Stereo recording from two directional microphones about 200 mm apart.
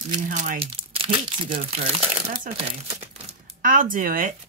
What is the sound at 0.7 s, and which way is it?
Speech, 30° right (ahead or behind).